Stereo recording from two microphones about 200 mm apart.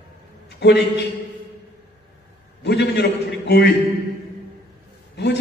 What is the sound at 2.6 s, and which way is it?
A man's voice, 55° left (ahead or behind).